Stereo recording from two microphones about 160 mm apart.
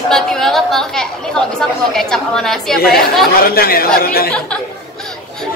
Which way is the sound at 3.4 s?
70° left (ahead or behind).